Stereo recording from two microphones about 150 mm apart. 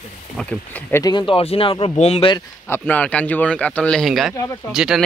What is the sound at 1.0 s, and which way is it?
Speech, 30° left (ahead or behind).